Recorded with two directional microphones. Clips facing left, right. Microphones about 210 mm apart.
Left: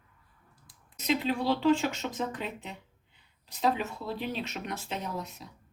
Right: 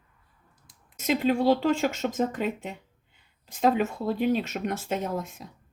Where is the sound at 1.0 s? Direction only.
45° right (ahead or behind).